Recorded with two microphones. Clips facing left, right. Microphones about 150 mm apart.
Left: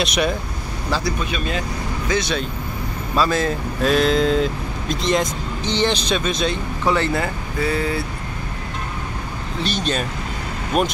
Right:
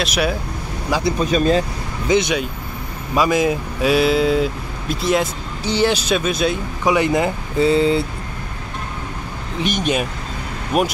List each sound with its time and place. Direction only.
0.0 s speech: 5° right (ahead or behind)
1.2 s speech: 40° right (ahead or behind)
2.0 s speech: 20° right (ahead or behind)
9.6 s speech: 15° right (ahead or behind)